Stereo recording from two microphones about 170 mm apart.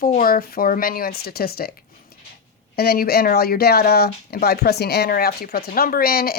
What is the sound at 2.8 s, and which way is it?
Speech, 65° left (ahead or behind).